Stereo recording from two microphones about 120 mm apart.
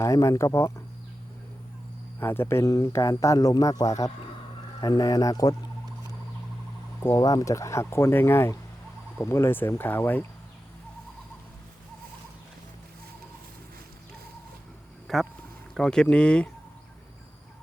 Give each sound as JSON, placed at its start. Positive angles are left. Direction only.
{"t": 0.0, "sound": "speech", "side_deg": 25}
{"t": 2.2, "sound": "speech", "side_deg": 20}
{"t": 7.2, "sound": "speech", "side_deg": 30}
{"t": 15.0, "sound": "a sound", "side_deg": 0}
{"t": 15.7, "sound": "speech", "side_deg": 5}